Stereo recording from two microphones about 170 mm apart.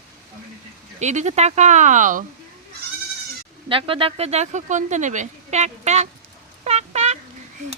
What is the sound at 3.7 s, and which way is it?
Speech, 30° right (ahead or behind).